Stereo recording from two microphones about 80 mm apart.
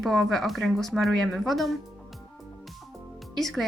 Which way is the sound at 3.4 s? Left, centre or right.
Centre.